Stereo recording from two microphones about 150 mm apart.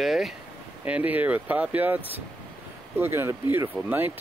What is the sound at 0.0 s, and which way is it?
Speech, centre (ahead or behind).